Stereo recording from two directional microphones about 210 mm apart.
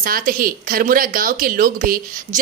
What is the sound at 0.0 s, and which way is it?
A woman's voice, 40° right (ahead or behind).